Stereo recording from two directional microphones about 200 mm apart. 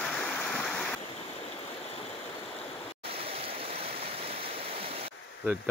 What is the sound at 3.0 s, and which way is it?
Stream, 30° right (ahead or behind).